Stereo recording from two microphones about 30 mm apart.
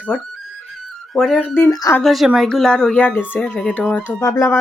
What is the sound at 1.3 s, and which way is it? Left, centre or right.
Speech, left.